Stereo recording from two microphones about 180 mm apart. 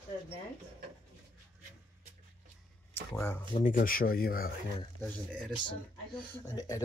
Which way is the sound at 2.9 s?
10° left (ahead or behind).